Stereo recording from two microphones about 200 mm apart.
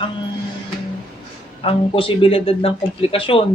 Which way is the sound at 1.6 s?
25° left (ahead or behind).